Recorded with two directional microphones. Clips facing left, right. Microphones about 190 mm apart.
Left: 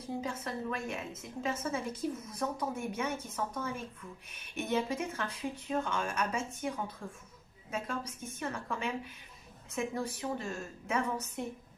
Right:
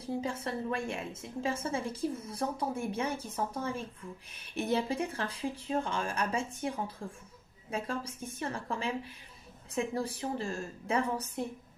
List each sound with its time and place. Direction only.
0.0 s a woman's voice: 30° right (ahead or behind)